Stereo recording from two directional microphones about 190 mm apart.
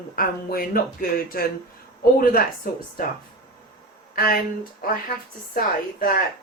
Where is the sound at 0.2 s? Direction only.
50° left (ahead or behind).